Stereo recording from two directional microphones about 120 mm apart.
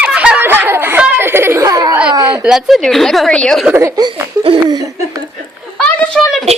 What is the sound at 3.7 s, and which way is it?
Speech, 25° right (ahead or behind).